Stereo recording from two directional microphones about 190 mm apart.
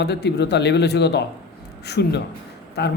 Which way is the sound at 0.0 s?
65° left (ahead or behind).